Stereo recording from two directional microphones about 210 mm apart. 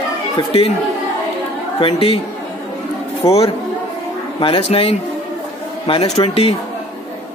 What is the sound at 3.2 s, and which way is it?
Speech, 30° left (ahead or behind).